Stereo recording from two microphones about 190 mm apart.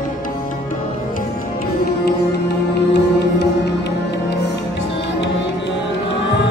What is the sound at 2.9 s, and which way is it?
Music, 65° left (ahead or behind).